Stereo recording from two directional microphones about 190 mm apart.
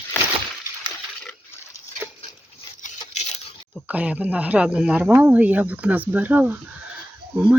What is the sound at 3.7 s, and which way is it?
Speech, 5° right (ahead or behind).